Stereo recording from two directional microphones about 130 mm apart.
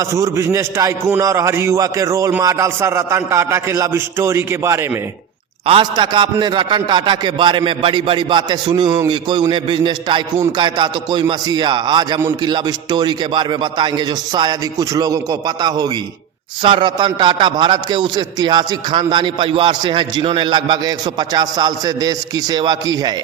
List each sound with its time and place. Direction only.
0.0 s a man's voice: 25° right (ahead or behind)
5.6 s a man's voice: 40° right (ahead or behind)